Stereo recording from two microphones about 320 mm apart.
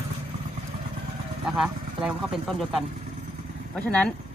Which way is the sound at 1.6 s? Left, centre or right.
Centre.